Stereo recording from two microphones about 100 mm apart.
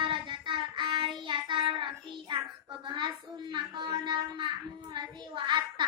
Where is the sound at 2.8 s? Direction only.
50° right (ahead or behind).